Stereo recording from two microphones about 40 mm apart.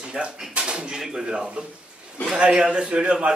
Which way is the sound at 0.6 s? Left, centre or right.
Right.